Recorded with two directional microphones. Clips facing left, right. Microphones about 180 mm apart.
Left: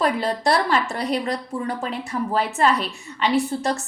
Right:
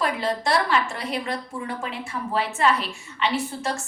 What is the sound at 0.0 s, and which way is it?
A woman's voice, 35° left (ahead or behind).